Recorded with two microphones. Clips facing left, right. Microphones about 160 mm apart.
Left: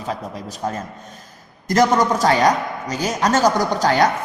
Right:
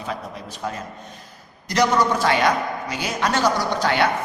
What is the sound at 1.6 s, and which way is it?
A man's voice, 45° left (ahead or behind).